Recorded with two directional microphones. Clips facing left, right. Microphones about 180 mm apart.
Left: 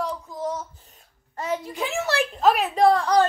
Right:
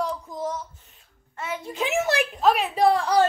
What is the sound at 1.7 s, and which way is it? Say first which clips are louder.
Speech: right 2 dB; 20° right (ahead or behind).